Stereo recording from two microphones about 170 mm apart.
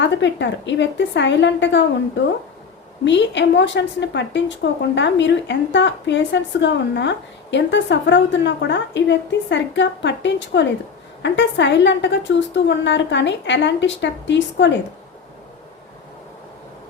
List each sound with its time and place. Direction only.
0.0 s a woman's voice: 90° left